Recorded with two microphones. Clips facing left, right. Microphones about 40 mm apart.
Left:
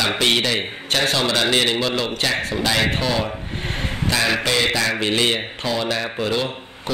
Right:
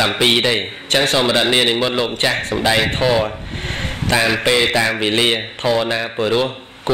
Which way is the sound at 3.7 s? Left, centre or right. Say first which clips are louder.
Right 4 dB; right.